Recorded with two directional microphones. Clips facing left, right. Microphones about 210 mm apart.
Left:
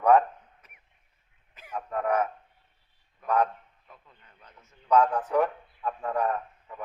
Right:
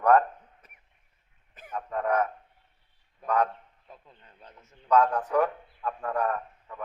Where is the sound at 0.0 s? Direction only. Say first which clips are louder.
Left 1 dB; 10° left (ahead or behind).